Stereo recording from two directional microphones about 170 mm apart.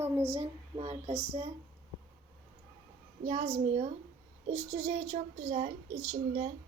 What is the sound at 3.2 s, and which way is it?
A woman's voice, 40° right (ahead or behind).